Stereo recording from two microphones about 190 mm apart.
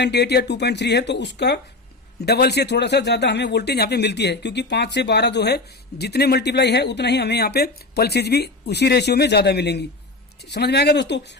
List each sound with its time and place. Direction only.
0.0 s speech: 60° left (ahead or behind)